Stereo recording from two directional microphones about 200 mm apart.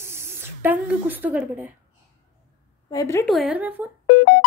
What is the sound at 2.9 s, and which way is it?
Speech, 15° left (ahead or behind).